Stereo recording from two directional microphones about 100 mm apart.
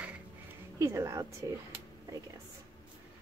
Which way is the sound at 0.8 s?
30° right (ahead or behind).